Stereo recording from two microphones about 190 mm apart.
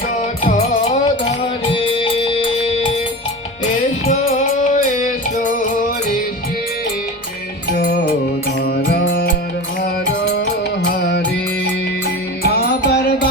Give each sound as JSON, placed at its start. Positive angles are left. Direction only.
{"t": 0.4, "sound": "music", "side_deg": 45}
{"t": 1.0, "sound": "music", "side_deg": 25}
{"t": 4.0, "sound": "music", "side_deg": 35}
{"t": 9.0, "sound": "music", "side_deg": 75}
{"t": 9.8, "sound": "music", "side_deg": 60}
{"t": 12.4, "sound": "music", "side_deg": 55}